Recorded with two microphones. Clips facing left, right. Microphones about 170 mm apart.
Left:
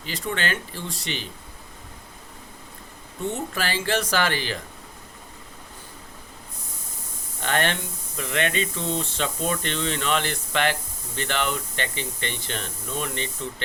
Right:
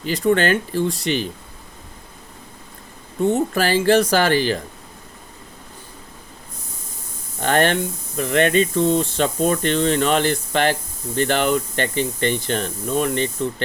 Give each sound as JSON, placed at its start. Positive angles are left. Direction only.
{"t": 0.0, "sound": "speech", "side_deg": -40}
{"t": 3.2, "sound": "speech", "side_deg": -40}
{"t": 7.4, "sound": "speech", "side_deg": -40}